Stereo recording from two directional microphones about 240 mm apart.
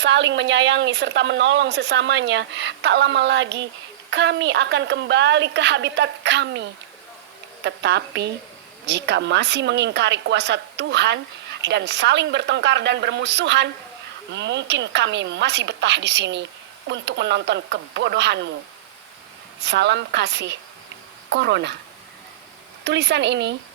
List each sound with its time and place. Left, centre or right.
0.0 s speech: right
19.6 s speech: right
22.8 s speech: right